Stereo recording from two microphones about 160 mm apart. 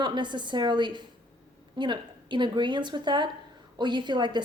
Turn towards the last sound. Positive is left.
turn(degrees=-30)  # may be behind; listen again after turning